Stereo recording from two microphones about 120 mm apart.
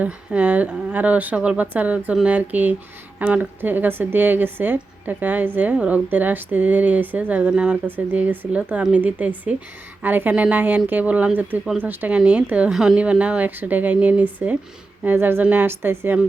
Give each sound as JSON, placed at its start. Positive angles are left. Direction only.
{"t": 0.0, "sound": "a woman's voice", "side_deg": -10}